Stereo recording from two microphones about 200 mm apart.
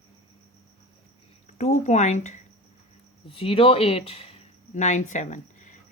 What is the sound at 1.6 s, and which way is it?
Speech, 35° left (ahead or behind).